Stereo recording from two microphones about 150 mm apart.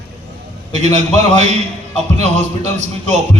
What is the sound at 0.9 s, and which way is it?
A man's voice, 50° right (ahead or behind).